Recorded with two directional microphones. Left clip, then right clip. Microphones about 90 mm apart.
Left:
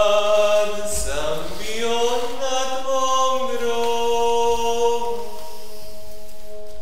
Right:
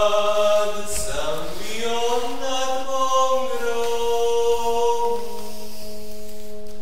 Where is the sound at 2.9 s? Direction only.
25° left (ahead or behind).